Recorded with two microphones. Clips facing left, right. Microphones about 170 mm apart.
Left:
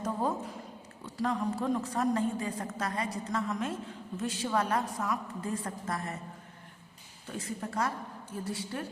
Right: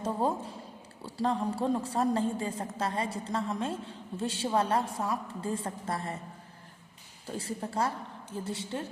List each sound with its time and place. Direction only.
0.0 s a sound: 30° right (ahead or behind)
1.0 s a woman's voice: 30° right (ahead or behind)
7.3 s a woman's voice: 30° right (ahead or behind)